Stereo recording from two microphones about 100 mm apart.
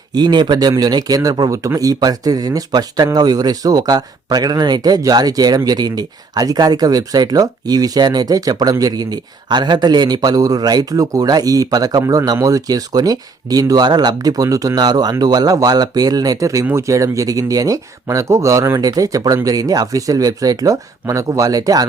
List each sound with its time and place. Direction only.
0.1 s a man's voice: 45° right (ahead or behind)